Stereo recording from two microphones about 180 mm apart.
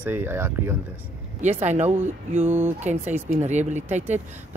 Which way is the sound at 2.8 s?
40° right (ahead or behind).